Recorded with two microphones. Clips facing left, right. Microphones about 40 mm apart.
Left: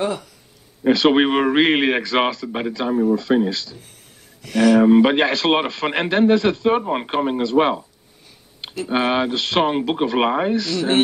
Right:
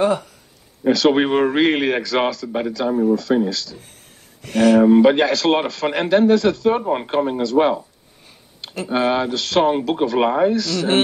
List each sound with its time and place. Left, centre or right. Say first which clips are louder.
0.0 s speech: right 5 dB; right
0.8 s a man's voice: even; left
4.4 s speech: right 1 dB; right
4.7 s a man's voice: right 2 dB; centre
9.0 s a man's voice: right 1 dB; left